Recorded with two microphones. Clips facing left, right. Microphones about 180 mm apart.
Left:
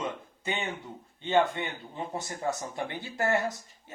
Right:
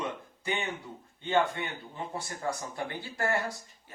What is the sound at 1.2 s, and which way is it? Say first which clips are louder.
Speech: left 2 dB; 20° left (ahead or behind).